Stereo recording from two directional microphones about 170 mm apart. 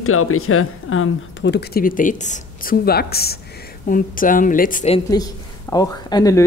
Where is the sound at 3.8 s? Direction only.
55° left (ahead or behind).